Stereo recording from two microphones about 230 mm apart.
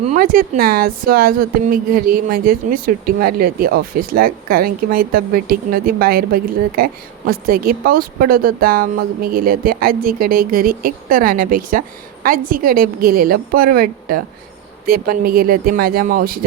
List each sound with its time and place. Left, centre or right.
0.0 s a woman's voice: right